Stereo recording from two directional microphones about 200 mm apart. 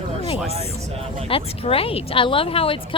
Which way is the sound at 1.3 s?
30° left (ahead or behind).